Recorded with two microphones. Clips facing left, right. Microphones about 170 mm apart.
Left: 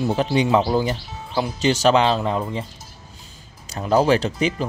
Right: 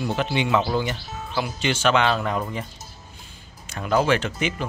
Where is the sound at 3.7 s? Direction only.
35° left (ahead or behind).